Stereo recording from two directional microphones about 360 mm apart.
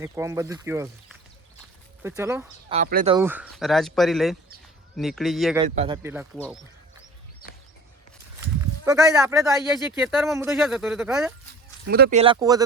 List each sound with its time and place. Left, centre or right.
0.0 s speech: centre
2.7 s speech: right
3.2 s speech: centre
5.6 s speech: centre
8.8 s speech: centre
11.9 s speech: right
12.2 s speech: centre